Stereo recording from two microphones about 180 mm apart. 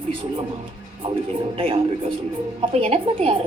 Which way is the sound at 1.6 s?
30° right (ahead or behind).